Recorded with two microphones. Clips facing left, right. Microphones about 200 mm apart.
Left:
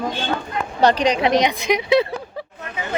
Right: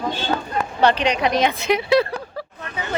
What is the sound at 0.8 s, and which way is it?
Speech, 40° left (ahead or behind).